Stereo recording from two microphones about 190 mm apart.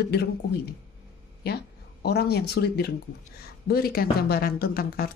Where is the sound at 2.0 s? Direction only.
55° left (ahead or behind).